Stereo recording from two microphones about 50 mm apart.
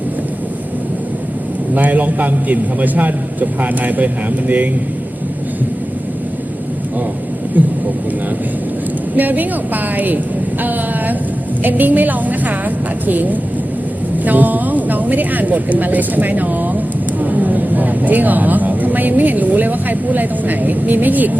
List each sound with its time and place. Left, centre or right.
1.7 s a man's voice: right
9.1 s a man's voice: right